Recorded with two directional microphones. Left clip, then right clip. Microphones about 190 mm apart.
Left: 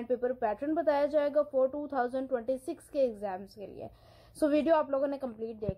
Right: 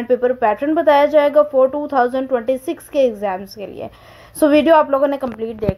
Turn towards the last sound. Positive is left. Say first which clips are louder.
# right 15 dB
turn(degrees=-35)  # may be behind; listen again after turning